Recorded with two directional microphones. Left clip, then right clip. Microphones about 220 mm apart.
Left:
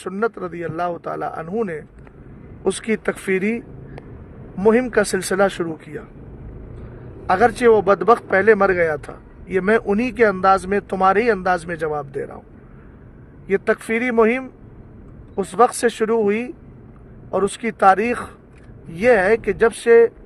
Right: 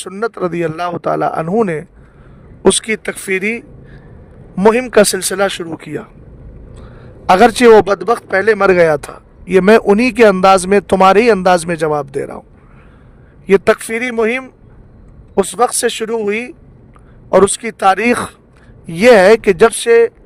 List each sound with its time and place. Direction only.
0.1 s speech: 50° right (ahead or behind)
7.3 s speech: 50° right (ahead or behind)
13.5 s speech: 50° right (ahead or behind)